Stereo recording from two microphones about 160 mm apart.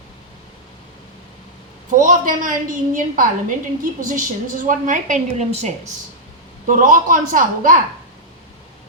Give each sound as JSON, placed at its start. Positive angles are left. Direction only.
{"t": 1.9, "sound": "a woman's voice", "side_deg": -55}